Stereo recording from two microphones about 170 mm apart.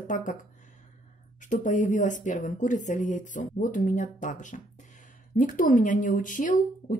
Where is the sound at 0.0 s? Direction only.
50° left (ahead or behind).